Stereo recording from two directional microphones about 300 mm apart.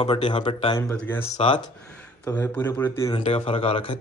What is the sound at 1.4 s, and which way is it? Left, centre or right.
Speech, centre.